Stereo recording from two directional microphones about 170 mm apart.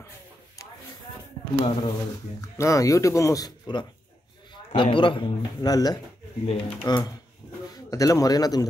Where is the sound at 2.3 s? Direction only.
20° left (ahead or behind).